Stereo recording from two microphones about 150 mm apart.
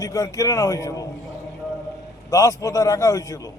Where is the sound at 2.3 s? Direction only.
20° left (ahead or behind).